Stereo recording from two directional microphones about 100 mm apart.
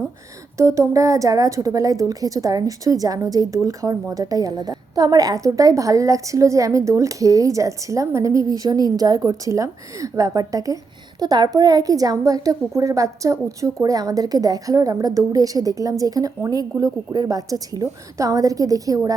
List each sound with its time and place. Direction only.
0.5 s a woman's voice: 30° right (ahead or behind)